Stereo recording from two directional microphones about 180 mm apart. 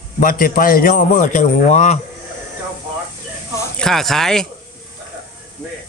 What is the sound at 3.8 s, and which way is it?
Speech, centre (ahead or behind).